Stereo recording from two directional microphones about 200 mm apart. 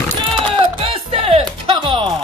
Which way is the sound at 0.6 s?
30° right (ahead or behind).